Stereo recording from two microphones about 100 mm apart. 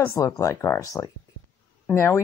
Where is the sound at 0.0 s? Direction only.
30° left (ahead or behind).